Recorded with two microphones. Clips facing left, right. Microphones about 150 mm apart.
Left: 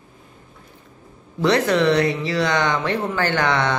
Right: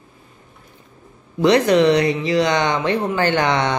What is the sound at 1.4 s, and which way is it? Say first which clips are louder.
Speech: right 4 dB; 20° right (ahead or behind).